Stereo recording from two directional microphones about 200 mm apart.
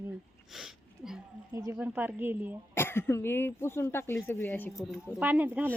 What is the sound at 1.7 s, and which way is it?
Speech, 10° right (ahead or behind).